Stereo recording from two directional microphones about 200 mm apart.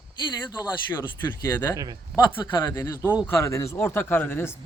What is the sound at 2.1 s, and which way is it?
Speech, centre (ahead or behind).